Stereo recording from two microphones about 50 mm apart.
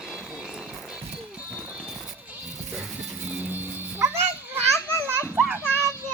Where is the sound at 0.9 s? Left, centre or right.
Right.